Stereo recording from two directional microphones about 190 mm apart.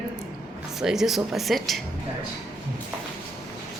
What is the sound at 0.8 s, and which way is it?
Speech, centre (ahead or behind).